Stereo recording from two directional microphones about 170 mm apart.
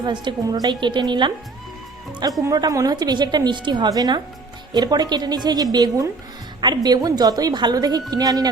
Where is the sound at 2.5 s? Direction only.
20° right (ahead or behind).